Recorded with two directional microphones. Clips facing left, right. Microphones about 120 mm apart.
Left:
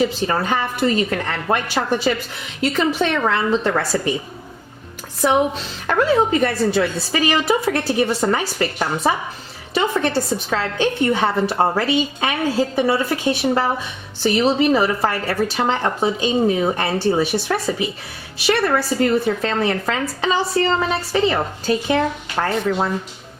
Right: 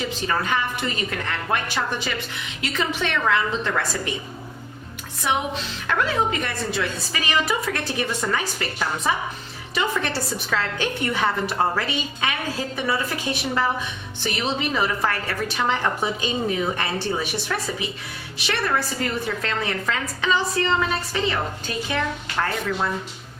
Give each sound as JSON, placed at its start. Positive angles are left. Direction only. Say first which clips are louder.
{"t": 0.0, "sound": "a woman's voice", "louder": "left 6 dB", "side_deg": 35}
{"t": 6.4, "sound": "a woman's voice", "louder": "left 9 dB", "side_deg": 30}